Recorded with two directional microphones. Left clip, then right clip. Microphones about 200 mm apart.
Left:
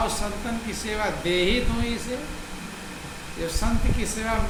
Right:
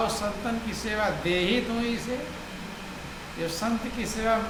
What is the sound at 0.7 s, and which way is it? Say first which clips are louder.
Speech: left 1 dB; 10° right (ahead or behind).